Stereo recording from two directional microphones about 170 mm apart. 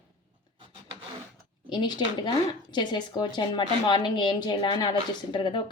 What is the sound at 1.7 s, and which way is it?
Speech, 25° left (ahead or behind).